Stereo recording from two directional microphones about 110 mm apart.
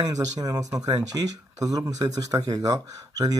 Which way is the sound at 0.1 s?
35° right (ahead or behind).